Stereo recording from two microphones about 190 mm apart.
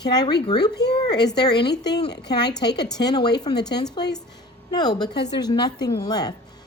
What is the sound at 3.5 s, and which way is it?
Speech, 25° left (ahead or behind).